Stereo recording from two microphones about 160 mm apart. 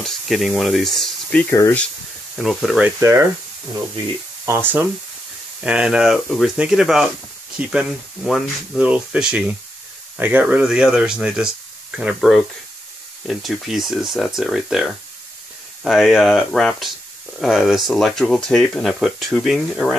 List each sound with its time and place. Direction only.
0.0 s speech: centre (ahead or behind)
2.3 s speech: centre (ahead or behind)
3.0 s speech: 20° right (ahead or behind)
4.5 s speech: 15° right (ahead or behind)